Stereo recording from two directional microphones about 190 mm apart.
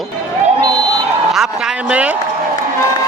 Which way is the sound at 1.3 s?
Centre (ahead or behind).